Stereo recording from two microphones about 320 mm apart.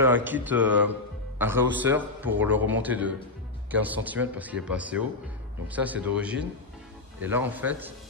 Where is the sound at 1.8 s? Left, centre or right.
Centre.